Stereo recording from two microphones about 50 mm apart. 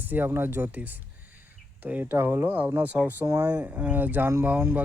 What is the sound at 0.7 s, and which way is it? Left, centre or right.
Speech, right.